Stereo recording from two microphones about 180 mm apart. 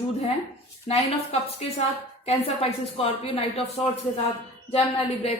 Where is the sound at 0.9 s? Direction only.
35° left (ahead or behind).